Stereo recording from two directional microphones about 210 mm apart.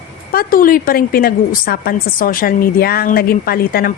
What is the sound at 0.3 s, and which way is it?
A woman's voice, 45° left (ahead or behind).